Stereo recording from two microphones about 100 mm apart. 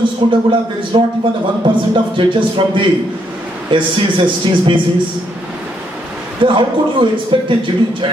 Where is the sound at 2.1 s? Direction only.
55° right (ahead or behind).